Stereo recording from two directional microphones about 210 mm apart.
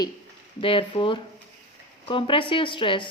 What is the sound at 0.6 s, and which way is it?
A woman's voice, 25° left (ahead or behind).